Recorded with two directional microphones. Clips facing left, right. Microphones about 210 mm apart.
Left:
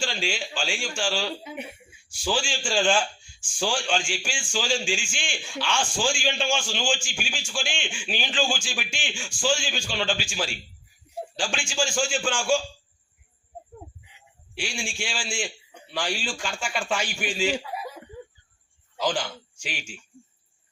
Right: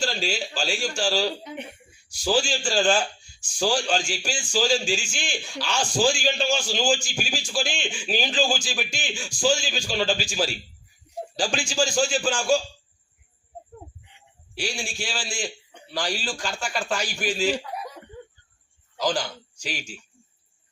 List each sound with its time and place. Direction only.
0.0 s a man's voice: 40° right (ahead or behind)
1.5 s a sound: 5° left (ahead or behind)
2.0 s a man's voice: 40° right (ahead or behind)
14.5 s a man's voice: 40° right (ahead or behind)
17.5 s chuckle: 5° left (ahead or behind)
18.9 s a man's voice: 40° right (ahead or behind)